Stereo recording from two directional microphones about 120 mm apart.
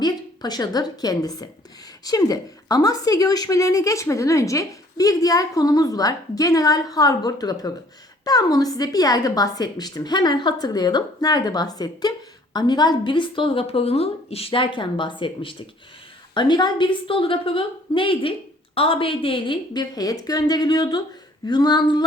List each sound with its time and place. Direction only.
0.0 s a woman's voice: 35° left (ahead or behind)